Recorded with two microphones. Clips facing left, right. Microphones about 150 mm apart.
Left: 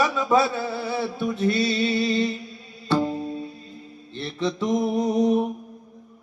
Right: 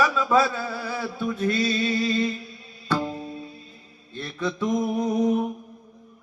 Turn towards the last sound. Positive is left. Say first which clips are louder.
# left 2 dB
turn(degrees=25)  # may be behind; listen again after turning